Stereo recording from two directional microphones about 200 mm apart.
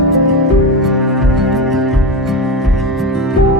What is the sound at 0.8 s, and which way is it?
Music, centre (ahead or behind).